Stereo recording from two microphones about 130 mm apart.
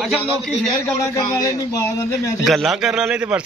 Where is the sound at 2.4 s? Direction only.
Centre (ahead or behind).